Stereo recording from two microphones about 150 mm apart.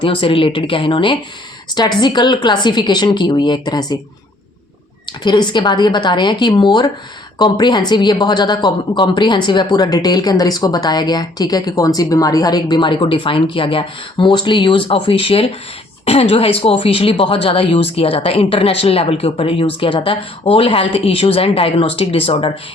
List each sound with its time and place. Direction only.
0.0 s speech: 35° left (ahead or behind)
5.2 s speech: 30° left (ahead or behind)